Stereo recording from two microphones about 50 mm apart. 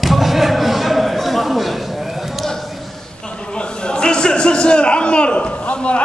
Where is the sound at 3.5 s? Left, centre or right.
Centre.